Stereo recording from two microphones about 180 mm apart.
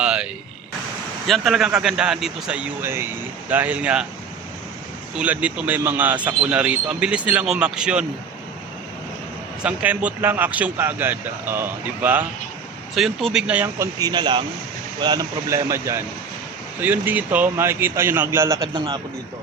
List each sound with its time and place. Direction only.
0.0 s vehicle: 5° right (ahead or behind)
1.3 s a man's voice: centre (ahead or behind)
5.1 s a man's voice: 5° right (ahead or behind)
9.6 s a man's voice: 10° right (ahead or behind)
12.9 s a man's voice: centre (ahead or behind); by 18.9 s 25° right (ahead or behind)